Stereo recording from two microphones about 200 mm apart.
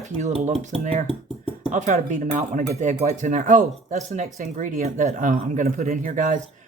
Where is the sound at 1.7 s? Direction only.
40° right (ahead or behind).